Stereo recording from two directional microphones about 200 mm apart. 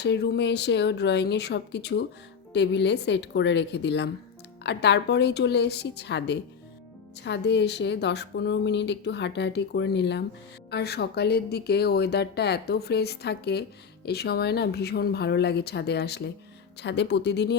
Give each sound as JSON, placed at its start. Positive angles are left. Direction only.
{"t": 0.0, "sound": "speech", "side_deg": 55}